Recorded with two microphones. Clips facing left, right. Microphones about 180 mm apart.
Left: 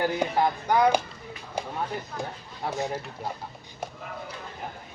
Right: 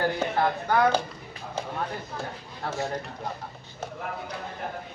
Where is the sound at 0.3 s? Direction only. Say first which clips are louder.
Left 1 dB; 15° left (ahead or behind).